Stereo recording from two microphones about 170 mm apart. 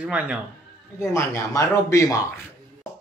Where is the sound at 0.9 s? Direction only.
15° left (ahead or behind).